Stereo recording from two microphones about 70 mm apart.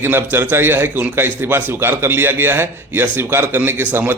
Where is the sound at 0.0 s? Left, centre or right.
Right.